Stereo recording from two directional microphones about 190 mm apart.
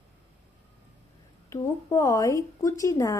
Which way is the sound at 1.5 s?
15° left (ahead or behind).